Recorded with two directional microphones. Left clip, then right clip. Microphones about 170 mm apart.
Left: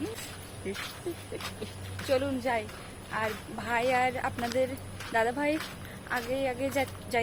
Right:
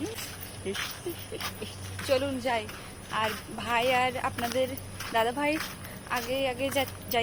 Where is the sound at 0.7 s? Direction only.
60° right (ahead or behind).